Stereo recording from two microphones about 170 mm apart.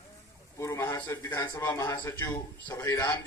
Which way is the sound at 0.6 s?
15° left (ahead or behind).